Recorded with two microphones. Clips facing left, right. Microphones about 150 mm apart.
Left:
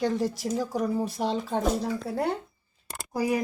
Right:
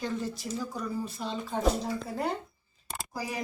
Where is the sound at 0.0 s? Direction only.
85° left.